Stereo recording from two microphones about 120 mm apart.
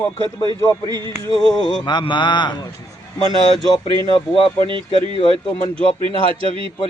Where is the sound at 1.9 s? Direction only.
40° left (ahead or behind).